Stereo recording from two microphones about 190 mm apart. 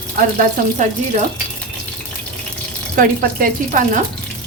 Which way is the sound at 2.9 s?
45° right (ahead or behind).